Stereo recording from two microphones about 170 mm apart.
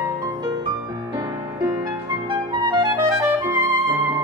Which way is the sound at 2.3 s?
25° right (ahead or behind).